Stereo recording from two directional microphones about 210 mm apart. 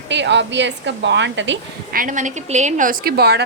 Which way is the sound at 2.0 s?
40° right (ahead or behind).